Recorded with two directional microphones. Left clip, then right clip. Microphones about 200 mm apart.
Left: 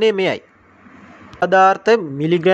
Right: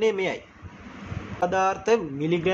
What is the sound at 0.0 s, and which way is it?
Speech, 45° left (ahead or behind).